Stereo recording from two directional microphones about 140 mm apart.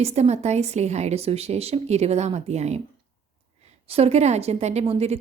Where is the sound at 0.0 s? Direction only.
50° right (ahead or behind).